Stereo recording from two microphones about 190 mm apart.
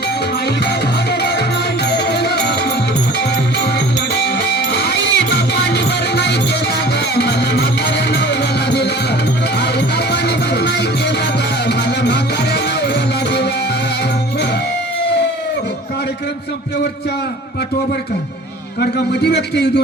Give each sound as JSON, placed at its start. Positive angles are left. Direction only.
{"t": 1.2, "sound": "music", "side_deg": 60}
{"t": 4.1, "sound": "music", "side_deg": 60}
{"t": 10.1, "sound": "music", "side_deg": 60}
{"t": 18.8, "sound": "a man's voice", "side_deg": 60}